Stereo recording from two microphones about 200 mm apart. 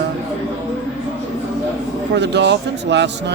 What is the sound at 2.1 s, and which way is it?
Speech, 60° right (ahead or behind).